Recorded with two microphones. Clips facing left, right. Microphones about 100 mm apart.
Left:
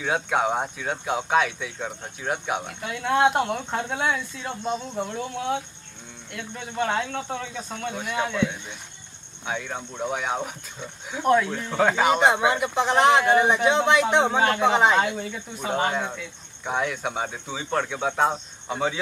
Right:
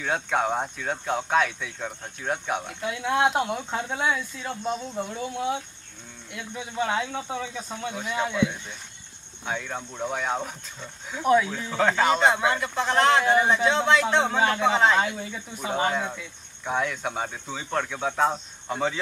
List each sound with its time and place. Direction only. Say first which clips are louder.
0.0 s speech: left 2 dB; 5° left (ahead or behind)
15.1 s speech: left 3 dB; centre (ahead or behind)